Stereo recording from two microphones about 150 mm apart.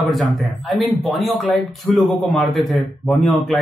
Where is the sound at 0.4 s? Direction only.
Centre (ahead or behind).